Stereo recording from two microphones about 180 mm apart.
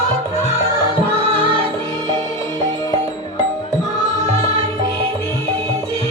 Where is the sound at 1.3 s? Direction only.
30° right (ahead or behind).